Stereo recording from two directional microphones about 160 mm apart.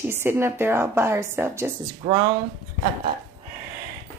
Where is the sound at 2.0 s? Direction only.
25° right (ahead or behind).